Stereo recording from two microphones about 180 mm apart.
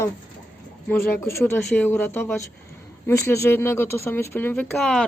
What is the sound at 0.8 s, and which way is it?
Speech, 15° left (ahead or behind).